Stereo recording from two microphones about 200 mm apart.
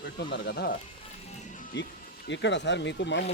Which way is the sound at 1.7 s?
60° left (ahead or behind).